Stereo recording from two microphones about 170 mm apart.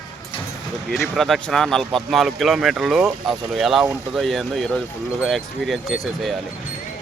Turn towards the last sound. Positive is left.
turn(degrees=0)  # may be behind; listen again after turning